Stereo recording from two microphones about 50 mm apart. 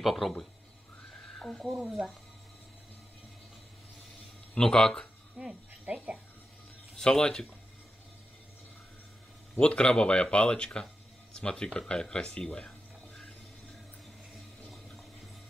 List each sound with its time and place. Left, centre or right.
0.0 s speech: centre
1.9 s speech: centre
4.6 s speech: centre
5.5 s speech: right
7.0 s speech: centre
9.6 s speech: centre